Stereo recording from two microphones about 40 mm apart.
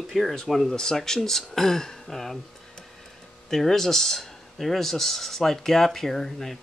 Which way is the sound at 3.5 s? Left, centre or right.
Centre.